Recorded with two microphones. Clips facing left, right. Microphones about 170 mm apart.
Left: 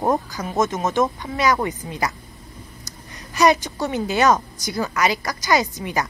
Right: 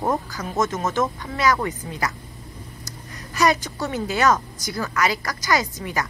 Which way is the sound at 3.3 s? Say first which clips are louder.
Left 3 dB; 20° left (ahead or behind).